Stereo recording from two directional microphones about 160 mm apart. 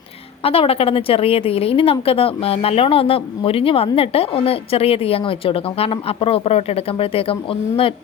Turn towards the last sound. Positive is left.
turn(degrees=35)  # may be behind; listen again after turning